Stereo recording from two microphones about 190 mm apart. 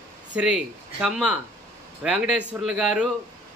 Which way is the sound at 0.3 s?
5° right (ahead or behind).